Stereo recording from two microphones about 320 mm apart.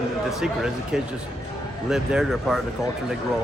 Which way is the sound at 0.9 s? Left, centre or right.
Centre.